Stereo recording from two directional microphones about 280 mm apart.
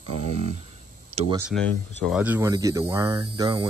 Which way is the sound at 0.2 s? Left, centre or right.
Right.